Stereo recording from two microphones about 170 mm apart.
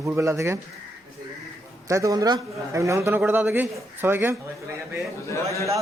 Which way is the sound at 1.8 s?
20° right (ahead or behind).